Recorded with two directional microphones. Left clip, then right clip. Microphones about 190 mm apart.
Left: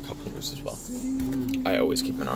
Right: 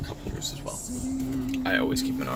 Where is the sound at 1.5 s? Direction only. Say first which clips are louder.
Even; 40° left (ahead or behind).